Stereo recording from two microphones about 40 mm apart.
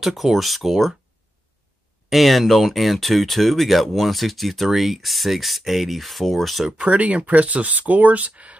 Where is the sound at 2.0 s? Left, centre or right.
Centre.